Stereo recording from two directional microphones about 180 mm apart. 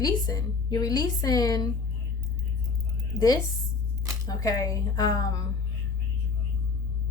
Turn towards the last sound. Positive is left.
turn(degrees=20)  # may be behind; listen again after turning